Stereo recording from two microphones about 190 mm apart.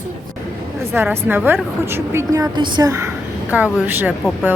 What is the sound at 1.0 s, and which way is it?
A woman's voice, 10° right (ahead or behind).